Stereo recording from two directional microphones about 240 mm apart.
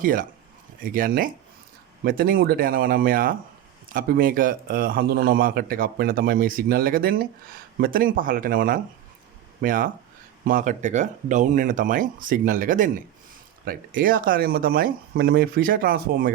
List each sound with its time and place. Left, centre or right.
0.0 s a man's voice: right